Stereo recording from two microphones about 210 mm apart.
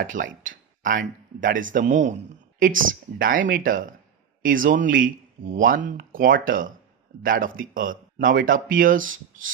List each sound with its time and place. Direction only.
0.0 s speech: 40° right (ahead or behind)